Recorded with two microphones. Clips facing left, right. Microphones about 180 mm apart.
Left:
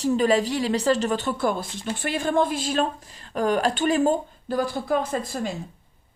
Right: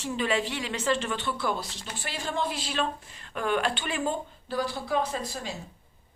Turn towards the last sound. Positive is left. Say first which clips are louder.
# left 6 dB
turn(degrees=50)  # may be behind; listen again after turning